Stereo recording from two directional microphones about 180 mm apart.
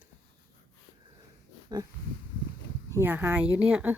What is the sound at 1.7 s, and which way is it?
Dog, 20° right (ahead or behind).